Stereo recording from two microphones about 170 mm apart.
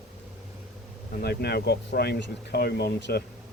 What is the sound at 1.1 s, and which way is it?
Speech, 70° left (ahead or behind).